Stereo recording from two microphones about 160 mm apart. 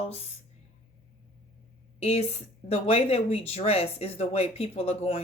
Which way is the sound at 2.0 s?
40° left (ahead or behind).